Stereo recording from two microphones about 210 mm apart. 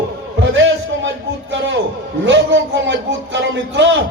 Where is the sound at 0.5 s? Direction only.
60° right (ahead or behind).